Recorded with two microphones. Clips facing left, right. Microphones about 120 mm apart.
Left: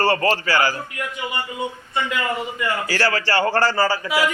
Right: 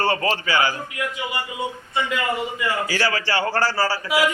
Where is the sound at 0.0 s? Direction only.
10° right (ahead or behind).